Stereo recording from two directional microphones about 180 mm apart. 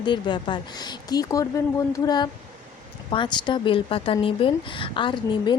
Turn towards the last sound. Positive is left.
turn(degrees=25)  # may be behind; listen again after turning